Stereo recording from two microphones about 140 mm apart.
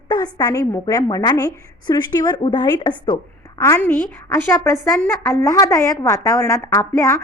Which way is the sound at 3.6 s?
20° left (ahead or behind).